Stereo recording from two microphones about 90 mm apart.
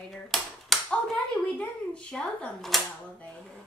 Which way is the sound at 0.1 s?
5° left (ahead or behind).